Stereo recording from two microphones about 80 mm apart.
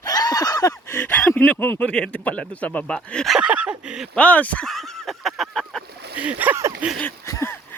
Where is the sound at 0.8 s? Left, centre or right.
Left.